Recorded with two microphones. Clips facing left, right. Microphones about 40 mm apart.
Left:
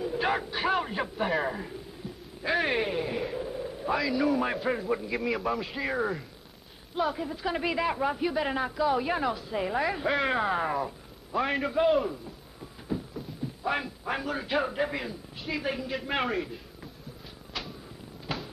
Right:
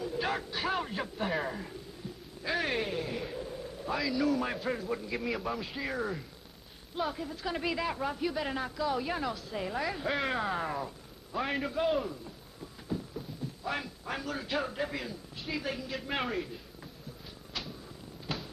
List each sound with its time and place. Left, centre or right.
0.0 s a sound: centre
1.4 s speech: centre
2.4 s a sound: centre
4.1 s a man's voice: centre
5.1 s a man's voice: centre
11.3 s a man's voice: centre
12.9 s a sound: centre
13.7 s a man's voice: centre
18.2 s fireworks: centre